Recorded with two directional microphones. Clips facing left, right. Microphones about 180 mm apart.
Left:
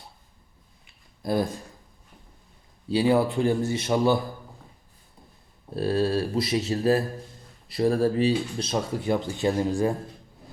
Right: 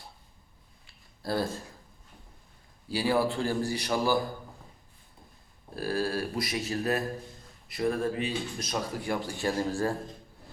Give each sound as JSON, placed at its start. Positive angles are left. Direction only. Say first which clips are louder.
{"t": 0.9, "sound": "a sound", "louder": "left 5 dB", "side_deg": 20}
{"t": 2.9, "sound": "speech", "louder": "left 5 dB", "side_deg": 20}
{"t": 5.7, "sound": "speech", "louder": "left 6 dB", "side_deg": 25}